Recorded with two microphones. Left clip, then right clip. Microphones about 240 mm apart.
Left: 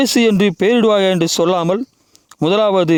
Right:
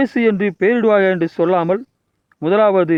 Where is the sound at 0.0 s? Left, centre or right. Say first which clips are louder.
Left 3 dB; left.